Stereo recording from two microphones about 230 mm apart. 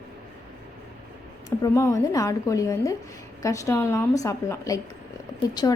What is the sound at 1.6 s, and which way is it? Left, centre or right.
A woman's voice, centre.